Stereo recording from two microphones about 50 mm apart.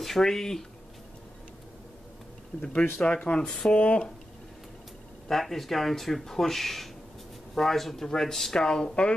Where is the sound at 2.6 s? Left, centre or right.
Left.